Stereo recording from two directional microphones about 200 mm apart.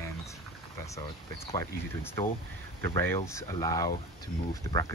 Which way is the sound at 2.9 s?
15° left (ahead or behind).